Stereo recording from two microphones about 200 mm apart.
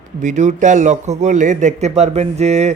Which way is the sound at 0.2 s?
35° right (ahead or behind).